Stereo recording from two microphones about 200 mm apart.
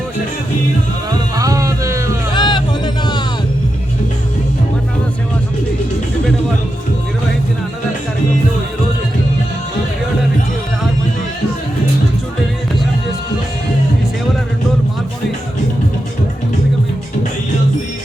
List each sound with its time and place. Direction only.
1.4 s music: 15° right (ahead or behind)
2.3 s music: 20° left (ahead or behind)